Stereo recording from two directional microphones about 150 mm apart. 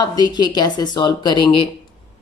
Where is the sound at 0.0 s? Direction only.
25° left (ahead or behind).